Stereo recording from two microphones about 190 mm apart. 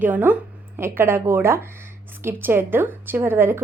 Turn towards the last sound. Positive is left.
turn(degrees=-10)  # may be behind; listen again after turning